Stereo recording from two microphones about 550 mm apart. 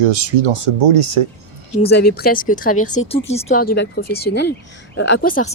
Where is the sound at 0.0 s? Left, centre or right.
Right.